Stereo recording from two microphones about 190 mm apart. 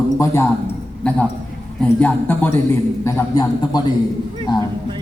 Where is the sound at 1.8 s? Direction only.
5° left (ahead or behind).